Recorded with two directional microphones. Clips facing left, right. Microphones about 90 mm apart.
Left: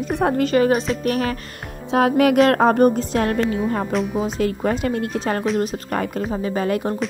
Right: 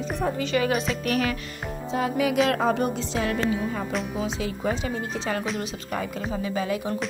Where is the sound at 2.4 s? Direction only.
50° left (ahead or behind).